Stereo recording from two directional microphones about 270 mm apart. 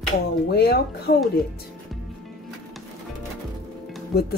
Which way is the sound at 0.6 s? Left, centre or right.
Left.